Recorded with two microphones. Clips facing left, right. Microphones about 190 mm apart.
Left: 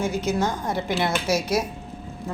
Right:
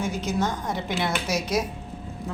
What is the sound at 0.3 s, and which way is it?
A woman's voice, 10° left (ahead or behind).